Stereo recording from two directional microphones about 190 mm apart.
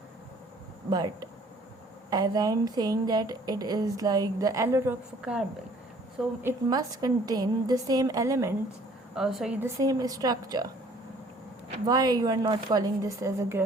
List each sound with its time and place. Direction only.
0.9 s speech: 20° right (ahead or behind)
6.4 s speech: 15° right (ahead or behind)
9.1 s a woman's voice: centre (ahead or behind)
9.6 s speech: 15° right (ahead or behind)
11.9 s speech: 20° right (ahead or behind)